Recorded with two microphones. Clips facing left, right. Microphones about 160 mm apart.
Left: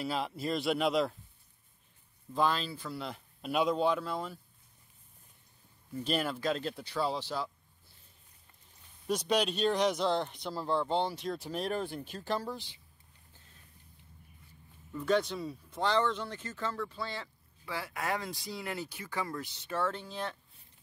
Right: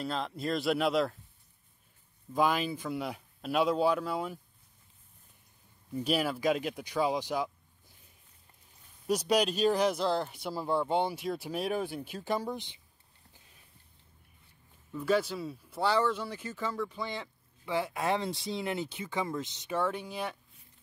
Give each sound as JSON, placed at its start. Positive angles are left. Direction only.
{"t": 0.0, "sound": "speech", "side_deg": 5}
{"t": 2.3, "sound": "speech", "side_deg": -10}
{"t": 3.4, "sound": "speech", "side_deg": 0}
{"t": 6.0, "sound": "speech", "side_deg": -10}
{"t": 9.0, "sound": "speech", "side_deg": -5}
{"t": 14.9, "sound": "speech", "side_deg": -5}